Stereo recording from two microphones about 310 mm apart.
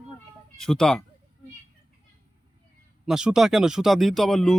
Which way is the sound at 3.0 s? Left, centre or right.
Centre.